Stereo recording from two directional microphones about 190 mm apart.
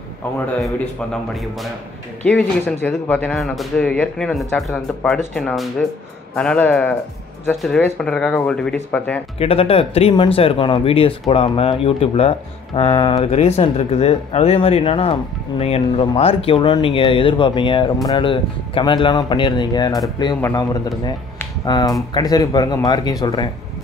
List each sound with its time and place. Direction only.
0.6 s a man's voice: centre (ahead or behind)
9.4 s speech: 30° left (ahead or behind)